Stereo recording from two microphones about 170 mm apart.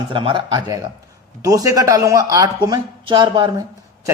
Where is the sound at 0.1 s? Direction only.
30° right (ahead or behind).